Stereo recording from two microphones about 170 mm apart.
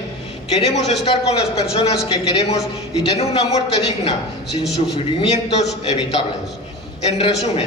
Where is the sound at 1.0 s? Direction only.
35° left (ahead or behind).